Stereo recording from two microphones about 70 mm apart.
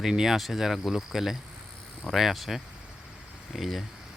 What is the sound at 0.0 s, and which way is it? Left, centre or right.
Speech, centre.